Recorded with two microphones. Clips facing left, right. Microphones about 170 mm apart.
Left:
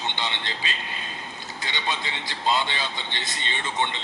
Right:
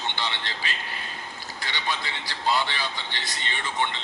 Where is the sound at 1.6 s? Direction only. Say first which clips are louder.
Left 1 dB; 20° left (ahead or behind).